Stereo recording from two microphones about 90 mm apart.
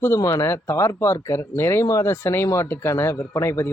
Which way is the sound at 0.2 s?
35° left (ahead or behind).